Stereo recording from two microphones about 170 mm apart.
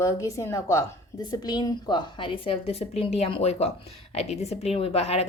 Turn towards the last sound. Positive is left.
turn(degrees=35)  # may be behind; listen again after turning